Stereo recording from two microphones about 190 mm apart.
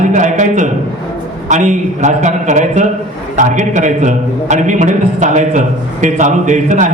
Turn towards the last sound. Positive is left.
turn(degrees=-40)  # may be behind; listen again after turning